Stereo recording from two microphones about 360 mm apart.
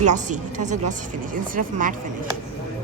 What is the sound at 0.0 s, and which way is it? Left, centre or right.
Speech, centre.